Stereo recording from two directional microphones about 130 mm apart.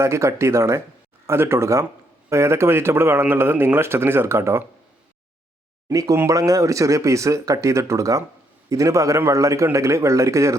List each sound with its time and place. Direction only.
0.0 s speech: 20° right (ahead or behind)
5.9 s speech: 25° right (ahead or behind)